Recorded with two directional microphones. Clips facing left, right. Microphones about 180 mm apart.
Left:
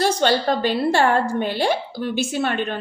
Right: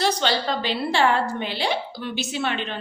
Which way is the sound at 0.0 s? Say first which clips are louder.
Left 4 dB; 50° left (ahead or behind).